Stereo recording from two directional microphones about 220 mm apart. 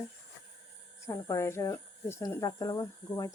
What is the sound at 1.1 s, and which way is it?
Speech, 15° left (ahead or behind).